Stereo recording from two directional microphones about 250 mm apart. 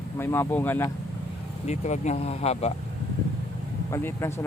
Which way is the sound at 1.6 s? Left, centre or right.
Left.